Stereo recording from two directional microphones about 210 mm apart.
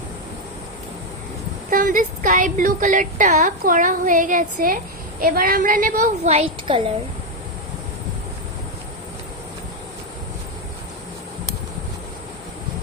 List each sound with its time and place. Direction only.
1.7 s a woman's voice: 40° right (ahead or behind)